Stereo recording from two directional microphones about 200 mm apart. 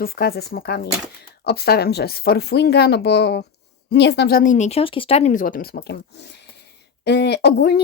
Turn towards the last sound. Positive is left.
turn(degrees=55)  # may be behind; listen again after turning